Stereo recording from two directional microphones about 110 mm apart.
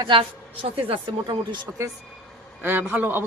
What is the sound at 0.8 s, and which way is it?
Speech, 55° right (ahead or behind).